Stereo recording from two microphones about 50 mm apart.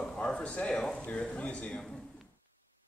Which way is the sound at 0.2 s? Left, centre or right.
Left.